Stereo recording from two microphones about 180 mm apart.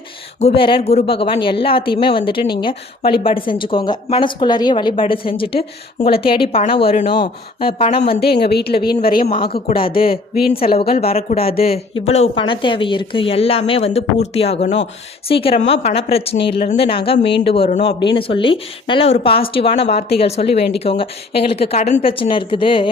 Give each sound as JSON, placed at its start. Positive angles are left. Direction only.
{"t": 0.3, "sound": "a woman's voice", "side_deg": 35}
{"t": 8.2, "sound": "speech", "side_deg": 65}
{"t": 9.2, "sound": "a woman's voice", "side_deg": 30}
{"t": 9.6, "sound": "speech", "side_deg": 55}
{"t": 9.9, "sound": "a woman's voice", "side_deg": 30}